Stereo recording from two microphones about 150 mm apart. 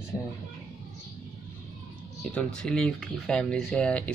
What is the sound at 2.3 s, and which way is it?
Speech, 5° left (ahead or behind).